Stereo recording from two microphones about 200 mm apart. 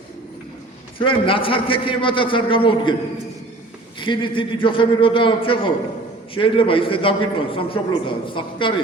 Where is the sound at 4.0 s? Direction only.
25° left (ahead or behind).